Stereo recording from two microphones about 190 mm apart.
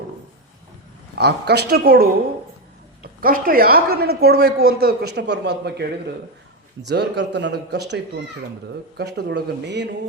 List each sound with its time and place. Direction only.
1.2 s a woman's voice: 60° right (ahead or behind)
6.8 s speech: 65° right (ahead or behind)